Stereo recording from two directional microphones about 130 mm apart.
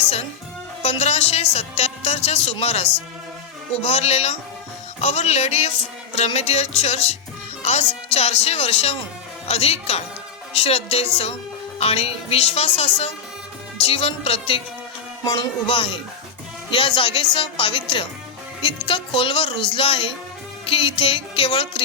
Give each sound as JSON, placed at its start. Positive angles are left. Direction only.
{"t": 0.8, "sound": "music", "side_deg": 55}
{"t": 1.5, "sound": "speech", "side_deg": 55}
{"t": 4.9, "sound": "music", "side_deg": 55}
{"t": 6.1, "sound": "speech", "side_deg": 55}
{"t": 15.2, "sound": "speech", "side_deg": 30}
{"t": 15.6, "sound": "speech", "side_deg": 45}